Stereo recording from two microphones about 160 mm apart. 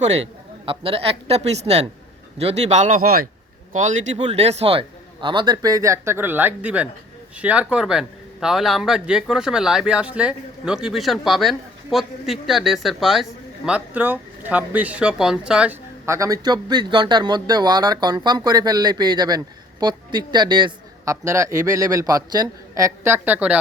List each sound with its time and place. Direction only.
0.0 s a woman's voice: 45° right (ahead or behind); by 3.2 s 60° right (ahead or behind)
3.7 s a man's voice: 50° right (ahead or behind); by 15.8 s 5° right (ahead or behind)
16.0 s a man's voice: 20° right (ahead or behind)